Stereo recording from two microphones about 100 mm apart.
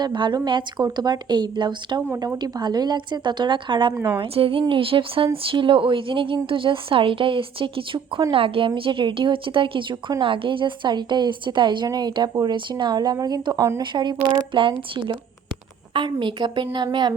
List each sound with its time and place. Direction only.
0.0 s speech: 50° right (ahead or behind)
13.8 s speech: 50° right (ahead or behind)